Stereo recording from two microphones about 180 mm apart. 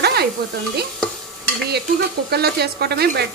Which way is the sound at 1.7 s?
65° right (ahead or behind).